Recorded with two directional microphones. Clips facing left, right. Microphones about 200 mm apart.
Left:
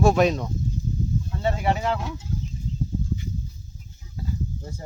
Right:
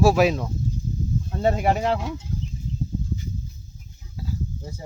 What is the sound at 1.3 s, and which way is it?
Speech, 40° right (ahead or behind).